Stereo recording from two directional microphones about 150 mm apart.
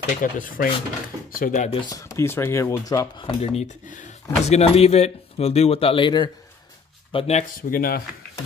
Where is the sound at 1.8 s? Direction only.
20° left (ahead or behind).